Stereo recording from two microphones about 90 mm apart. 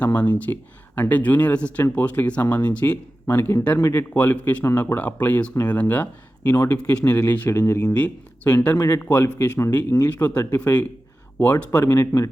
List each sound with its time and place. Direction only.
0.0 s speech: 15° left (ahead or behind)
7.9 s speech: 15° left (ahead or behind)
10.2 s speech: 20° left (ahead or behind)